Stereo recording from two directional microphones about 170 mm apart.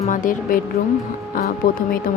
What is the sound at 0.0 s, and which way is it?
Speech, 50° left (ahead or behind).